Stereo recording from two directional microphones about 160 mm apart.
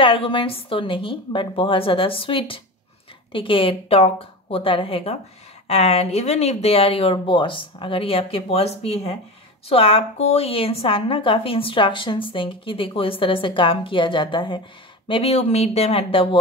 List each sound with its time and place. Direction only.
0.0 s a woman's voice: 35° left (ahead or behind)